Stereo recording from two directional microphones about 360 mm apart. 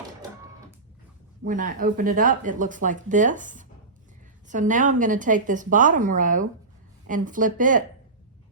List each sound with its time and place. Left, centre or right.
1.5 s speech: right